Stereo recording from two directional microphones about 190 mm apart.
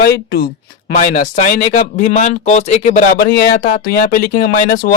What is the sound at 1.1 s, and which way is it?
Speech, 40° left (ahead or behind).